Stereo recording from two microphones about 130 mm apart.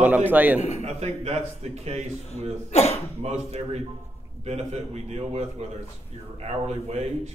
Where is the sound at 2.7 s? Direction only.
55° left (ahead or behind).